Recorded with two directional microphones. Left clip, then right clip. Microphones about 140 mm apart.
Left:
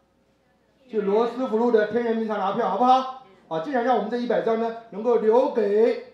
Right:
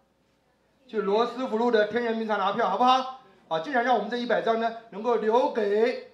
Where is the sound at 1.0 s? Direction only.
5° right (ahead or behind).